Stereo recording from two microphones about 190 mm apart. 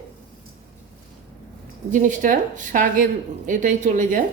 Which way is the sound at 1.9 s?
40° right (ahead or behind).